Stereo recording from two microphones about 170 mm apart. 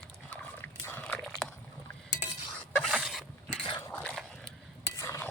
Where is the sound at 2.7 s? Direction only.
5° right (ahead or behind).